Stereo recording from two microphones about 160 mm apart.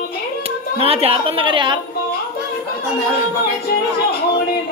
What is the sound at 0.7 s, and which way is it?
A woman's voice, 35° right (ahead or behind).